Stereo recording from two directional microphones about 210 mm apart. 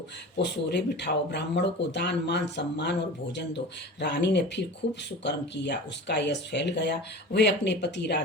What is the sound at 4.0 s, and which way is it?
Speech, 55° left (ahead or behind).